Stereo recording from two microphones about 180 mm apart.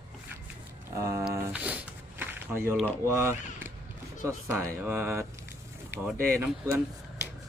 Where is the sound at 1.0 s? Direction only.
15° right (ahead or behind).